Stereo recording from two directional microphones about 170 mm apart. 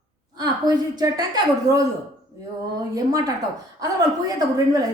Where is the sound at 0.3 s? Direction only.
25° right (ahead or behind).